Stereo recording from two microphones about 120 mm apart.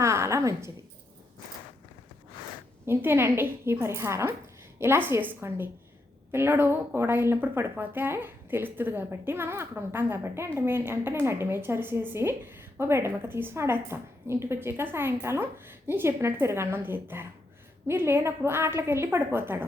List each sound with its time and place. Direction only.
0.0 s a woman's voice: 25° right (ahead or behind)
2.8 s a woman's voice: 20° right (ahead or behind)